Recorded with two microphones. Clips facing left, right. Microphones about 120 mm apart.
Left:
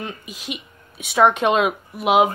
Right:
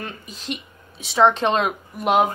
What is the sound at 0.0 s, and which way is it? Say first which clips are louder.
Speech: left 2 dB; 10° left (ahead or behind).